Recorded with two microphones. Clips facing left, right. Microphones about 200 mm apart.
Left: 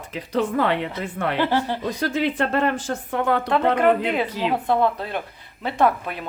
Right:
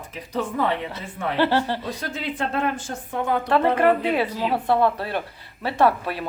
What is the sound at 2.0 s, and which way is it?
A woman's voice, 80° left.